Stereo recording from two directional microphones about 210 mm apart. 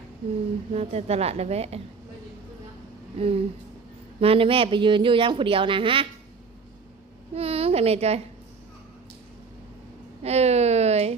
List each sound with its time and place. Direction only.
0.7 s a woman's voice: 30° right (ahead or behind)
3.2 s a woman's voice: 25° right (ahead or behind)
7.3 s a woman's voice: 30° right (ahead or behind)
10.2 s speech: 30° right (ahead or behind)